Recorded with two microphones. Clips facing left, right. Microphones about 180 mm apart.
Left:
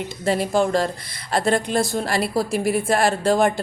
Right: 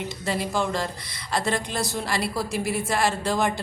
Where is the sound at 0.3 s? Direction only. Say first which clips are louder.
Left 7 dB; 55° left (ahead or behind).